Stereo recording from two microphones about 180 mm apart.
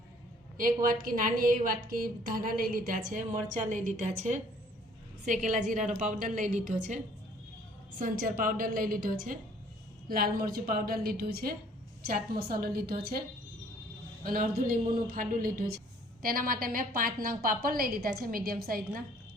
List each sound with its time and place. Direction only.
0.5 s a woman's voice: 50° right (ahead or behind)
14.3 s a woman's voice: 50° right (ahead or behind)